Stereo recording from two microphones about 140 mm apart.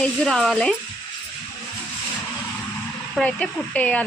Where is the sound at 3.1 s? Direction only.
10° left (ahead or behind).